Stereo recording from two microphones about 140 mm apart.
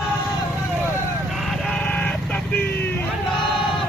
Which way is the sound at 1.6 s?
10° left (ahead or behind).